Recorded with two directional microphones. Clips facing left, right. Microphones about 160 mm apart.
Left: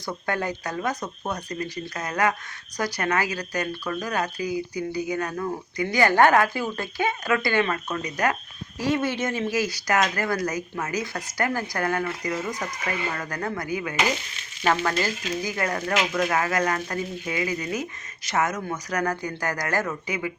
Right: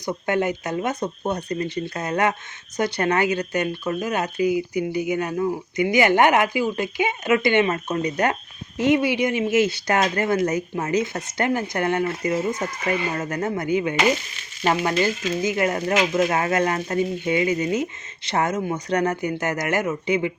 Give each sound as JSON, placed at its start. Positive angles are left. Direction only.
{"t": 0.0, "sound": "speech", "side_deg": -20}
{"t": 8.8, "sound": "speech", "side_deg": -15}